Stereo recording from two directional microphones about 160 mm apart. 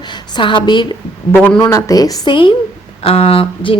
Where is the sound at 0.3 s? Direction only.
30° left (ahead or behind).